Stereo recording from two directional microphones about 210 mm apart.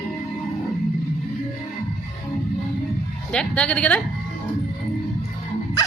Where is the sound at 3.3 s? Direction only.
5° left (ahead or behind).